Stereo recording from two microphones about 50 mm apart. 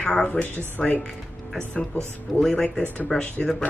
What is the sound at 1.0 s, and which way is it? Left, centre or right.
Music, centre.